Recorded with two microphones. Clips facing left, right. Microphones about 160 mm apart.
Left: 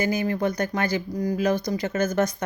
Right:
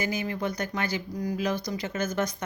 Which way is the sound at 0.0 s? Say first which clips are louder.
Left 6 dB; 45° left (ahead or behind).